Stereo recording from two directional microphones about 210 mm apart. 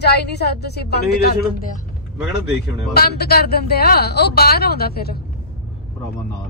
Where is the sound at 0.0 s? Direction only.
50° left (ahead or behind).